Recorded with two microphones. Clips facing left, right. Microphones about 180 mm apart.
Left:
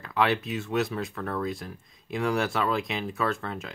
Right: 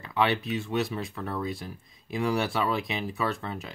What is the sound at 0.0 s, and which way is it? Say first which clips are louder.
Speech: left 1 dB; centre (ahead or behind).